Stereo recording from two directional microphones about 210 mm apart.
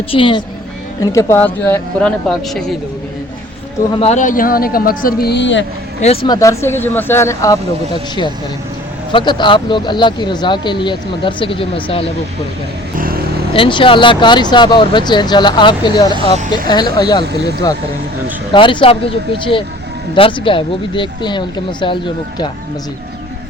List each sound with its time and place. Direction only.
0.1 s speech: 25° left (ahead or behind)
1.0 s speech: 15° left (ahead or behind)
3.9 s a man's voice: 30° left (ahead or behind); by 5.6 s 60° left (ahead or behind)
6.0 s speech: 25° left (ahead or behind)
9.1 s speech: 20° left (ahead or behind)
13.0 s vehicle: 45° right (ahead or behind)
13.5 s speech: 25° left (ahead or behind)
20.1 s speech: 25° left (ahead or behind)